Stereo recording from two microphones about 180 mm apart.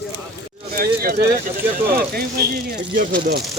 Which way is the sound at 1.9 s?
60° right (ahead or behind).